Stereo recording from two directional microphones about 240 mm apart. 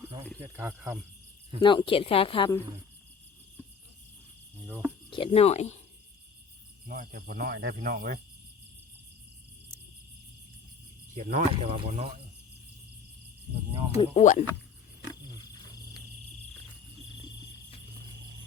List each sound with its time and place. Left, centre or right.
0.5 s speech: centre
1.6 s speech: left
4.6 s speech: centre
5.1 s speech: left
6.8 s speech: right
11.1 s speech: right
13.9 s speech: left